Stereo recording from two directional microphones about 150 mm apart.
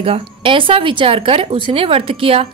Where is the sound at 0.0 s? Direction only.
40° right (ahead or behind).